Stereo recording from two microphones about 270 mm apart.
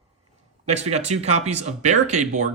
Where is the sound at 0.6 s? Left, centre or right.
Right.